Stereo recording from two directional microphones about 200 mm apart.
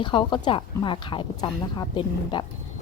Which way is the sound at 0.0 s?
25° left (ahead or behind).